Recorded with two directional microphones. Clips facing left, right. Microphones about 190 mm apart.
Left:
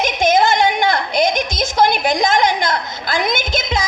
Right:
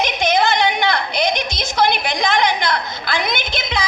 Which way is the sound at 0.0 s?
45° left (ahead or behind).